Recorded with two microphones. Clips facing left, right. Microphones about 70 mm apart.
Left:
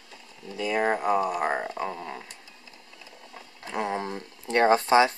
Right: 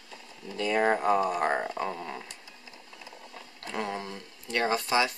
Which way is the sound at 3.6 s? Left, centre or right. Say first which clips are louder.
Left 4 dB; centre.